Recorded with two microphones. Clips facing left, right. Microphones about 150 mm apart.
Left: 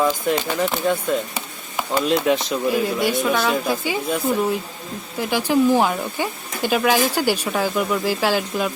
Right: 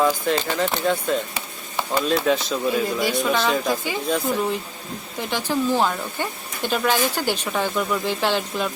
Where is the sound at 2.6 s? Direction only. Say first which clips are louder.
Left 2 dB; centre (ahead or behind).